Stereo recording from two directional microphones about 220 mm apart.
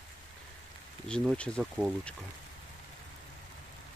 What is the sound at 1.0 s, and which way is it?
Speech, centre (ahead or behind).